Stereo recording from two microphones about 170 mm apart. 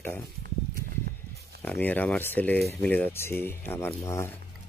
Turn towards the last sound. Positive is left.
turn(degrees=15)  # may be behind; listen again after turning